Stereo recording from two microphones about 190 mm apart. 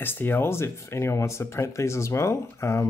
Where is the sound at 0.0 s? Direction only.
10° left (ahead or behind).